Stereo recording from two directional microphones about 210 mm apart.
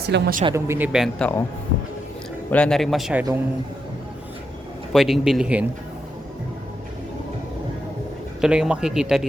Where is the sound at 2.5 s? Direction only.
5° left (ahead or behind).